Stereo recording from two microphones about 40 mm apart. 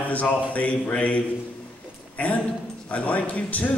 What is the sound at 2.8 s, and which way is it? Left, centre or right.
Speech, left.